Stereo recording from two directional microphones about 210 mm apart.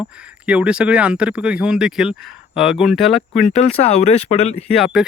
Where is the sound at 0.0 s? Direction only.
5° right (ahead or behind).